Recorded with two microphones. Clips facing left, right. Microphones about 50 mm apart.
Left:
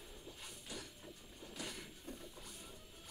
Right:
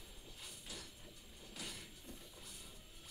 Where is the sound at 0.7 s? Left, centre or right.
Left.